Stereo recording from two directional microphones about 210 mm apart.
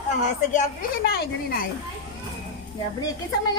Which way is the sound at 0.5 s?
45° left (ahead or behind).